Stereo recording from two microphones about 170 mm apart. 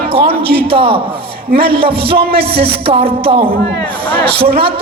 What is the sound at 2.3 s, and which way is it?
Music, 65° right (ahead or behind).